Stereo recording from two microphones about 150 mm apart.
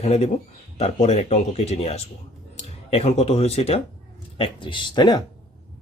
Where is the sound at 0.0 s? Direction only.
45° left (ahead or behind); by 5.2 s 30° left (ahead or behind).